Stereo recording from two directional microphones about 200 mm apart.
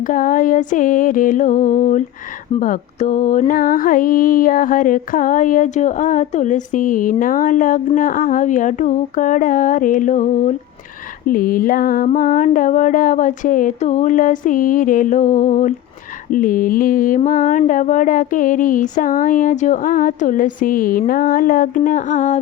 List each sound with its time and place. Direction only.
0.0 s mantra: 40° left (ahead or behind)